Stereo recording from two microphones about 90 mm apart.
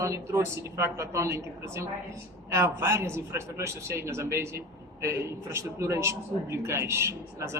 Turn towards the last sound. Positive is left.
turn(degrees=-30)  # may be behind; listen again after turning